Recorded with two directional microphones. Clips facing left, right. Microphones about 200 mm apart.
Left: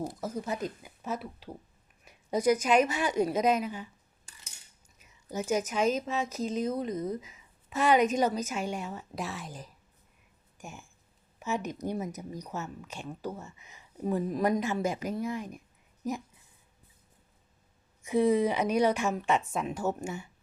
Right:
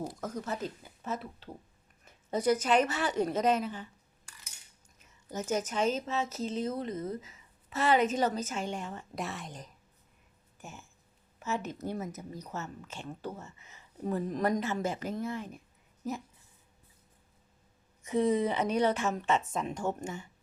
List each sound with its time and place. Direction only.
0.2 s speech: 10° left (ahead or behind)
4.9 s speech: 10° left (ahead or behind)
18.0 s speech: 10° left (ahead or behind)